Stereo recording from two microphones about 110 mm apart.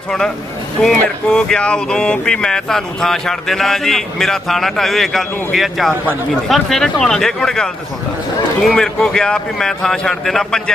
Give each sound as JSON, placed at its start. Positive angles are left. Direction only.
{"t": 0.8, "sound": "speech", "side_deg": 5}